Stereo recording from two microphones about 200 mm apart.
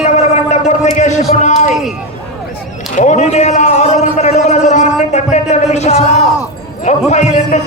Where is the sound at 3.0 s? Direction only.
35° left (ahead or behind).